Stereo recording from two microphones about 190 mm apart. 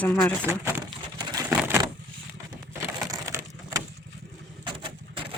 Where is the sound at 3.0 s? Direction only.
15° right (ahead or behind).